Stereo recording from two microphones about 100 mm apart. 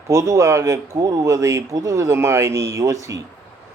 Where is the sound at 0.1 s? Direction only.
30° right (ahead or behind).